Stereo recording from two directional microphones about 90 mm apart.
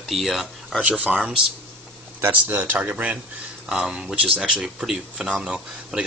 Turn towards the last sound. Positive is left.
turn(degrees=-10)  # may be behind; listen again after turning